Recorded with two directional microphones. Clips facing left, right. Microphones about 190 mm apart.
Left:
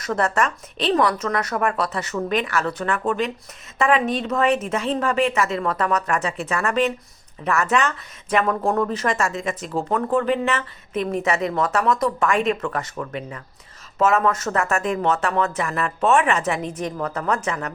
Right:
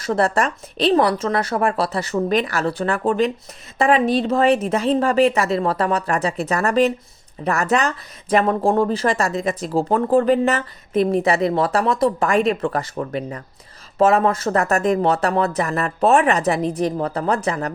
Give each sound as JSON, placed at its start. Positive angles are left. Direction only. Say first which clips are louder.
{"t": 0.0, "sound": "speech", "louder": "right 3 dB", "side_deg": -30}